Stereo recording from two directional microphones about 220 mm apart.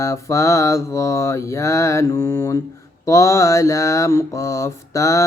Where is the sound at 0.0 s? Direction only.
15° left (ahead or behind).